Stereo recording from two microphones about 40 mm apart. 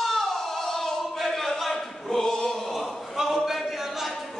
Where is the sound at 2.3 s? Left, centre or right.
Centre.